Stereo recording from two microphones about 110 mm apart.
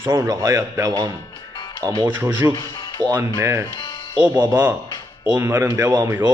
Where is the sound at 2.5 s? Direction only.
40° left (ahead or behind).